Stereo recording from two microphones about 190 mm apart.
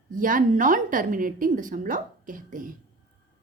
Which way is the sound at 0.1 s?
45° right (ahead or behind).